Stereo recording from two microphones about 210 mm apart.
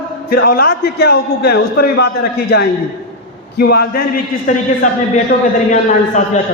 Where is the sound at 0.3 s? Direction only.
45° left (ahead or behind).